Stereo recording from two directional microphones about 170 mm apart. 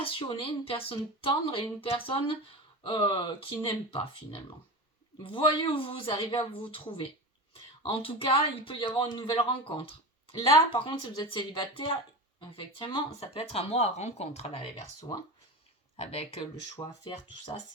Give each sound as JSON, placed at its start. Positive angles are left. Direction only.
{"t": 0.0, "sound": "speech", "side_deg": 30}
{"t": 5.2, "sound": "speech", "side_deg": 30}
{"t": 16.0, "sound": "speech", "side_deg": 35}
{"t": 16.8, "sound": "speech", "side_deg": 20}